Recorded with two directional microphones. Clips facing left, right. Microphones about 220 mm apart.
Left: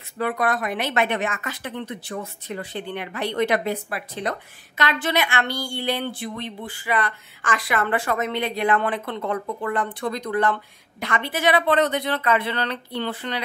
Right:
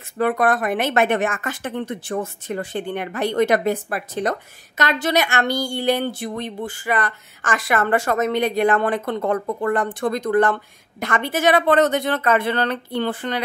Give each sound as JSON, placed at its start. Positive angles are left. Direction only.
{"t": 0.2, "sound": "a woman's voice", "side_deg": -50}